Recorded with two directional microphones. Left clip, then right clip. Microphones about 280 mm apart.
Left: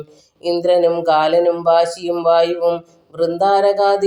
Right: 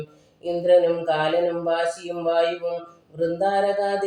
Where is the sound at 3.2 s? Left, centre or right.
Left.